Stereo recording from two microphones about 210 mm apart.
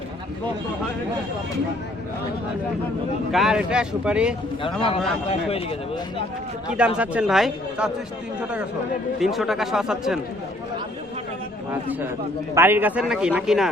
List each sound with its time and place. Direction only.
3.3 s speech: 5° right (ahead or behind)
5.3 s speech: 30° left (ahead or behind)
6.7 s speech: 5° right (ahead or behind)
9.1 s speech: centre (ahead or behind)
11.7 s a man's voice: 10° right (ahead or behind)